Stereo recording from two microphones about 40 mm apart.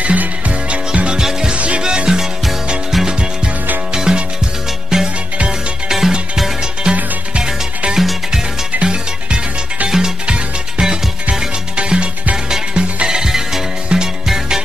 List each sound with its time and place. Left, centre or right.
0.0 s music: right
1.1 s music: centre
3.9 s music: centre
6.6 s music: right